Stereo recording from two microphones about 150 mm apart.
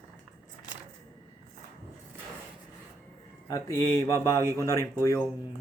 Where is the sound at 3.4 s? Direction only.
20° left (ahead or behind).